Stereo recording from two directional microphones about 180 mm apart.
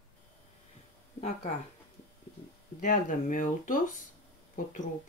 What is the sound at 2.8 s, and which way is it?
Speech, 45° left (ahead or behind).